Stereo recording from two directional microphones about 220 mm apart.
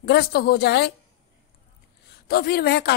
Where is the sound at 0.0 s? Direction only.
45° left (ahead or behind).